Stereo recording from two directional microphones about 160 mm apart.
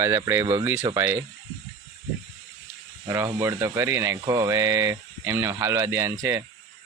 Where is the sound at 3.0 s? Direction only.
15° right (ahead or behind).